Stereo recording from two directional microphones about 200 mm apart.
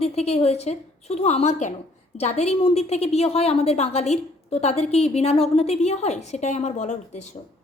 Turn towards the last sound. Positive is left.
turn(degrees=35)  # may be behind; listen again after turning